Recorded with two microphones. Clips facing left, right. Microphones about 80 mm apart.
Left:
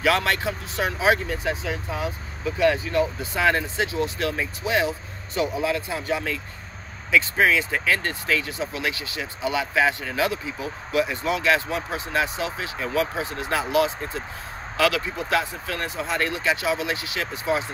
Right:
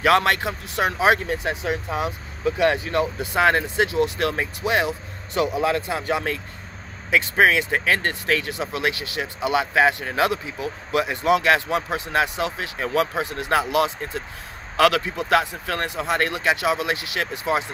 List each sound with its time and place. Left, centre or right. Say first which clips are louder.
0.0 s speech: right 4 dB; right